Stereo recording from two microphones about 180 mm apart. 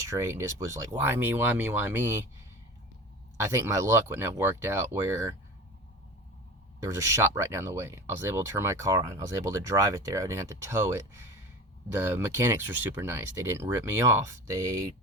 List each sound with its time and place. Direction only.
0.1 s speech: 15° right (ahead or behind)
3.3 s speech: 15° right (ahead or behind)
6.8 s speech: 15° right (ahead or behind)